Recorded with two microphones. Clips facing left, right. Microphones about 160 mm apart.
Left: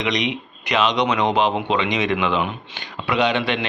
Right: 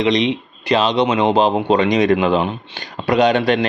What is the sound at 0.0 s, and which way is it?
Speech, 30° right (ahead or behind).